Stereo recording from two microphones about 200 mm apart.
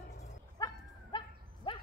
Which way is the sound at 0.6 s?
15° left (ahead or behind).